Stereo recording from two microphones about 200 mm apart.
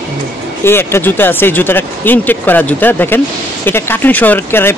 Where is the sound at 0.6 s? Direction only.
10° left (ahead or behind).